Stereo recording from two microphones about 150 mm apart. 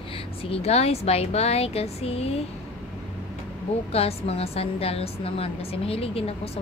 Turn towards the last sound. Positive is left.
turn(degrees=40)  # may be behind; listen again after turning